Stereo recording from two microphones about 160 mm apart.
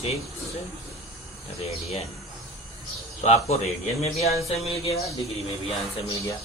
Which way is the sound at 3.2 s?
40° left (ahead or behind).